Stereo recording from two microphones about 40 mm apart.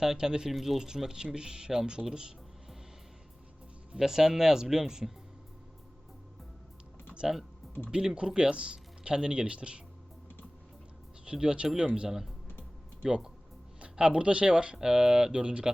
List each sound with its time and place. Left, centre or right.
0.0 s speech: centre
0.5 s speech: centre
0.8 s speech: centre
3.9 s speech: centre
7.9 s speech: right
11.3 s speech: right
11.6 s speech: centre